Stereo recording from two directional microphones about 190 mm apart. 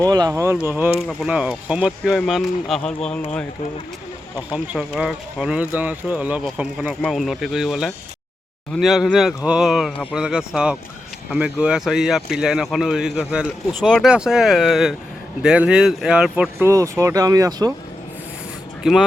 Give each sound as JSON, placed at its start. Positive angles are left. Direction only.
{"t": 0.1, "sound": "speech", "side_deg": -20}
{"t": 0.9, "sound": "speech", "side_deg": 0}
{"t": 4.4, "sound": "speech", "side_deg": -5}
{"t": 18.8, "sound": "speech", "side_deg": 0}